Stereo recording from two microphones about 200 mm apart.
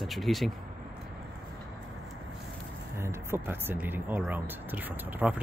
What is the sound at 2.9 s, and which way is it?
Speech, 15° right (ahead or behind).